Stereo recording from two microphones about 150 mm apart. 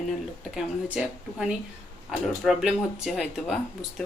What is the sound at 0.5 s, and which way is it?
Speech, 5° right (ahead or behind).